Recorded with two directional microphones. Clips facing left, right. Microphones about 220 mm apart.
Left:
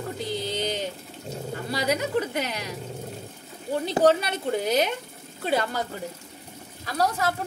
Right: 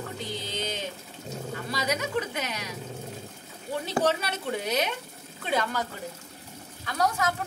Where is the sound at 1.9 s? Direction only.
40° left (ahead or behind).